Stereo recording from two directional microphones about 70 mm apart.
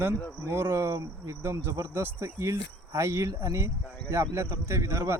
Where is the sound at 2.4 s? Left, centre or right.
Right.